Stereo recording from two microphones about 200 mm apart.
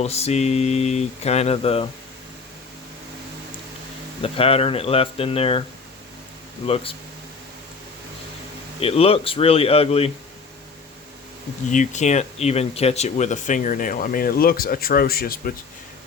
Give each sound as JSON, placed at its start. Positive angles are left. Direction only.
{"t": 0.0, "sound": "speech", "side_deg": 30}
{"t": 4.2, "sound": "speech", "side_deg": 30}
{"t": 8.8, "sound": "speech", "side_deg": 30}
{"t": 11.7, "sound": "speech", "side_deg": 40}